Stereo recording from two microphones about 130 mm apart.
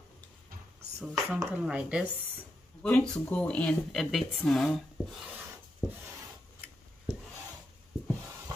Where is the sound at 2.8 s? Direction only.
5° left (ahead or behind).